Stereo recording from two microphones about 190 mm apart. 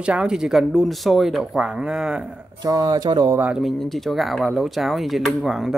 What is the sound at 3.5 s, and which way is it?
Speech, centre (ahead or behind).